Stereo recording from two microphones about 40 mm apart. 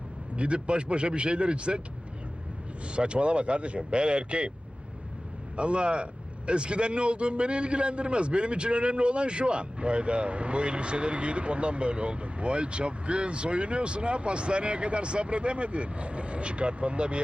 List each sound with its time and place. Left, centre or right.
0.3 s speech: right
2.8 s speech: right
5.5 s speech: right